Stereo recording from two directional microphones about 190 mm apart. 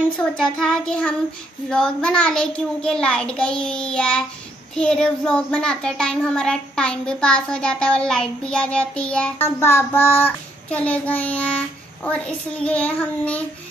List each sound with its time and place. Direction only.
0.2 s a child's voice: 5° left (ahead or behind)